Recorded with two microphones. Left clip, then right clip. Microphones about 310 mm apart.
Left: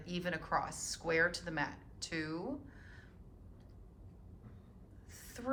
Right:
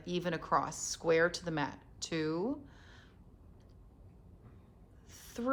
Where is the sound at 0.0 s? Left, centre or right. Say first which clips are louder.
Right 3 dB; centre.